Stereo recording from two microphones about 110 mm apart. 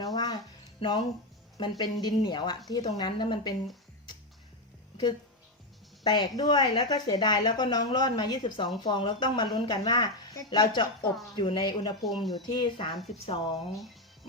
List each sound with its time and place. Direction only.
0.0 s music: 40° left (ahead or behind)
0.8 s a woman's voice: 45° left (ahead or behind)
6.0 s a woman's voice: 40° left (ahead or behind)
12.0 s speech: centre (ahead or behind)
12.5 s speech: 45° left (ahead or behind)